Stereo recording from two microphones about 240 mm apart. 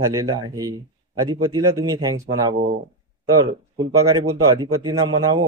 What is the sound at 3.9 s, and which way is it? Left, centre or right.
A man's voice, centre.